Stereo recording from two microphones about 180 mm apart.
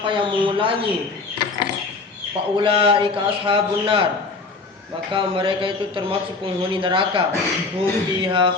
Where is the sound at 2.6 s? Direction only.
30° right (ahead or behind).